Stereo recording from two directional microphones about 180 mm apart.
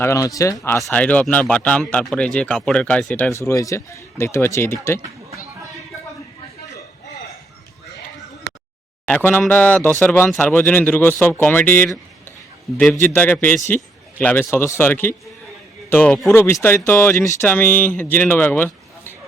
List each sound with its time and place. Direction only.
0.0 s speech: 15° left (ahead or behind)
3.3 s speech: 15° left (ahead or behind)
9.0 s a man's voice: 10° left (ahead or behind)